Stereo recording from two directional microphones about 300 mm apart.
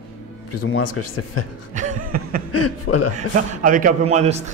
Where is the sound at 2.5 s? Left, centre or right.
Left.